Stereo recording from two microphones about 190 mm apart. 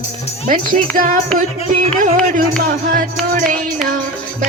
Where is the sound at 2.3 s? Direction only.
45° right (ahead or behind).